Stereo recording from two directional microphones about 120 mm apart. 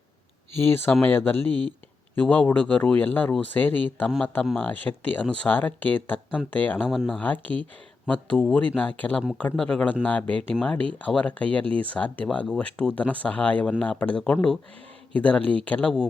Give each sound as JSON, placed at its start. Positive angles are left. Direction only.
{"t": 0.5, "sound": "speech", "side_deg": 20}
{"t": 6.8, "sound": "speech", "side_deg": -5}
{"t": 7.2, "sound": "speech", "side_deg": 15}